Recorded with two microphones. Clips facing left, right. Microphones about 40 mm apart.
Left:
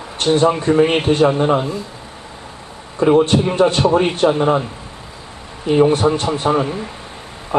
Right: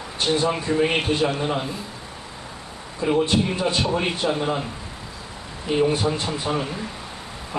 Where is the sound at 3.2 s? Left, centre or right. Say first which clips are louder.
Left 8 dB; left.